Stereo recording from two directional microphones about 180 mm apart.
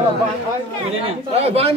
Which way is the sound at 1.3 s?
35° right (ahead or behind).